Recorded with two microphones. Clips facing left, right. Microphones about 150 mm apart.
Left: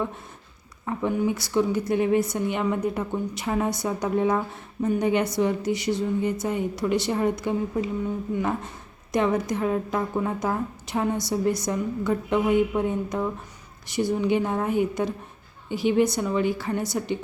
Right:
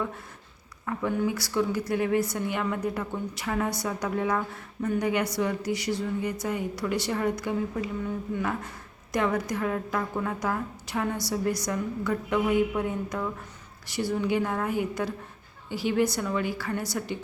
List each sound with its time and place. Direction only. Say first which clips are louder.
0.9 s a woman's voice: left 3 dB; 20° left (ahead or behind)